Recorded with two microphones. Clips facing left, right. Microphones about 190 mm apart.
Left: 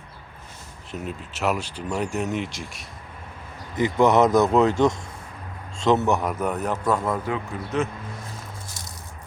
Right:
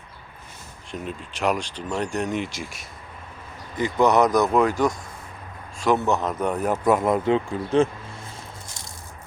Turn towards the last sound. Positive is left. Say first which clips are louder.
# right 6 dB
turn(degrees=-30)  # may be behind; listen again after turning